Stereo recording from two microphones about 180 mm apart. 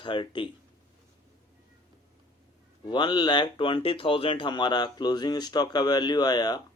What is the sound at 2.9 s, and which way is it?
Speech, 25° left (ahead or behind).